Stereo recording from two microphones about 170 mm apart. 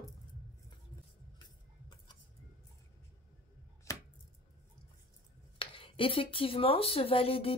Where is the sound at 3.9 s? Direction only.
20° left (ahead or behind).